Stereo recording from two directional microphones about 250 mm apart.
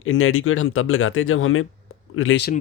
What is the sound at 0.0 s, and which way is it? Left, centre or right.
Speech, left.